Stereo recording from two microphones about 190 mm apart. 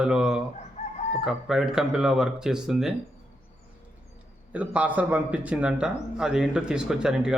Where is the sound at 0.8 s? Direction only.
40° left (ahead or behind).